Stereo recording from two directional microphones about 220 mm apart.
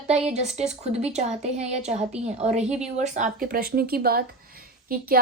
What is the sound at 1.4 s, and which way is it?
A woman's voice, 30° right (ahead or behind).